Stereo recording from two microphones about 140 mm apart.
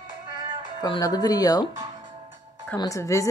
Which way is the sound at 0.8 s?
30° left (ahead or behind).